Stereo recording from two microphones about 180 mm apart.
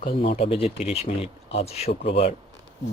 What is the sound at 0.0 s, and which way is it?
Speech, 50° left (ahead or behind).